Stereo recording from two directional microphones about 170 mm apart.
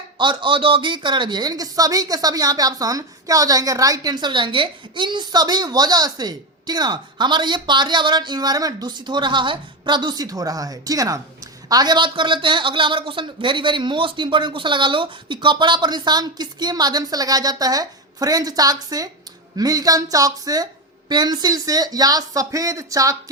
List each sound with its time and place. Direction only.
0.2 s a woman's voice: 30° right (ahead or behind)